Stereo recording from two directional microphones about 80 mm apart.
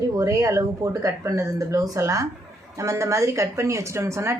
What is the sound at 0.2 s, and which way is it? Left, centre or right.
A woman's voice, right.